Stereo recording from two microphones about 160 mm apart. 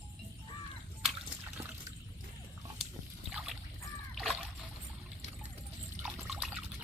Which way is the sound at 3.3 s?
Centre (ahead or behind).